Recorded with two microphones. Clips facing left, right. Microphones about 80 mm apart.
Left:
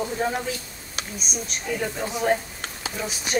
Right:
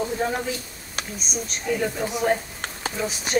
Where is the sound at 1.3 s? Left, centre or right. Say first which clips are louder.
Right 3 dB; centre.